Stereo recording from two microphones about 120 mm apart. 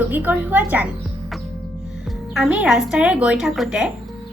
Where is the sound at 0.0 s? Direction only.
15° right (ahead or behind).